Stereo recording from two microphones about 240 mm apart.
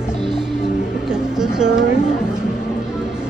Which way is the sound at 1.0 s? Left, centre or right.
Centre.